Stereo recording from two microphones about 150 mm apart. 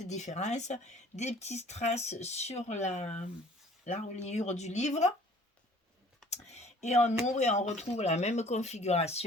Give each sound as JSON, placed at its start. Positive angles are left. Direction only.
{"t": 0.0, "sound": "speech", "side_deg": 50}
{"t": 6.3, "sound": "speech", "side_deg": 45}